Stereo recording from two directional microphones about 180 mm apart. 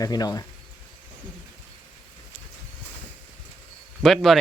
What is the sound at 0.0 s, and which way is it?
Speech, 20° left (ahead or behind).